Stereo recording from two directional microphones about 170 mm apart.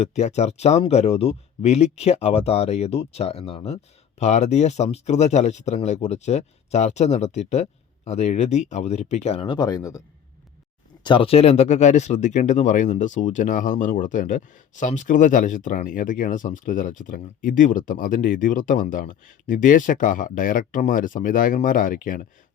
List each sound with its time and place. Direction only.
0.0 s speech: 40° left (ahead or behind); by 10.0 s 20° left (ahead or behind)
11.0 s speech: 30° left (ahead or behind); by 22.3 s 55° left (ahead or behind)